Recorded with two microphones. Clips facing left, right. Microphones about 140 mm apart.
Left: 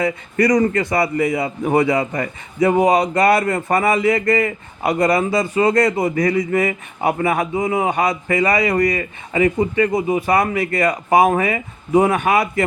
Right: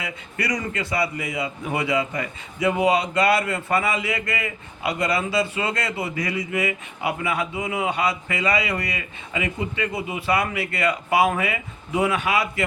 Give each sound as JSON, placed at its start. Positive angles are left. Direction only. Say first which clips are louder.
{"t": 0.0, "sound": "a man's voice", "louder": "left 12 dB", "side_deg": 45}